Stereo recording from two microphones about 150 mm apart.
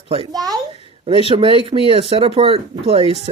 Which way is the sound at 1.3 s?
35° right (ahead or behind).